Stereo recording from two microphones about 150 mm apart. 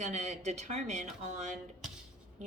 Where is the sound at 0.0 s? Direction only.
50° right (ahead or behind).